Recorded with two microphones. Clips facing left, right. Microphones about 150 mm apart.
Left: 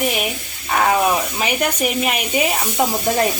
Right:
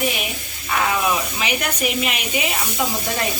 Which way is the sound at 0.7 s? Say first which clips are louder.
Left 4 dB; 45° left (ahead or behind).